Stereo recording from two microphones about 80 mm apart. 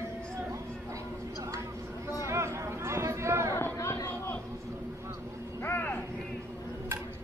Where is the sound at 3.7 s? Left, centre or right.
Left.